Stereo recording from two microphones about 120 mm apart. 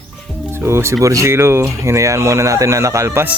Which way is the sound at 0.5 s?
20° right (ahead or behind).